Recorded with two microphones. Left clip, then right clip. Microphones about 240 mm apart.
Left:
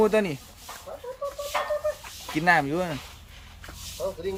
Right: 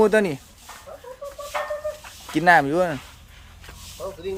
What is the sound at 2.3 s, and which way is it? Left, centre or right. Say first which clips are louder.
Speech: right 6 dB; right.